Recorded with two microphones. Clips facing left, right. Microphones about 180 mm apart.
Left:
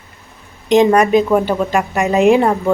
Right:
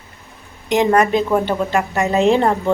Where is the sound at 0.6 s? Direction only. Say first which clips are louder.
Left 4 dB; 20° left (ahead or behind).